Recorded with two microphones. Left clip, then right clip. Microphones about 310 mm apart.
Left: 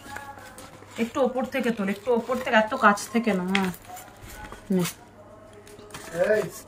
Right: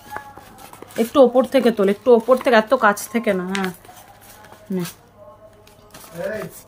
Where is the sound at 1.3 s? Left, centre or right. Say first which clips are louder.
Right 11 dB; centre.